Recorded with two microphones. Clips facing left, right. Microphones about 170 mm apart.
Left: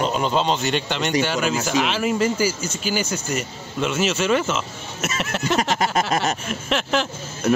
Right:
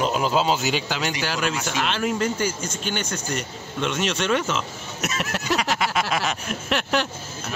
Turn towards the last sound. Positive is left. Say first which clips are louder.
# left 1 dB
turn(degrees=0)  # may be behind; listen again after turning